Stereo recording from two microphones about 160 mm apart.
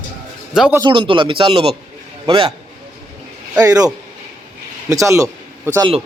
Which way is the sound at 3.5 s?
20° right (ahead or behind).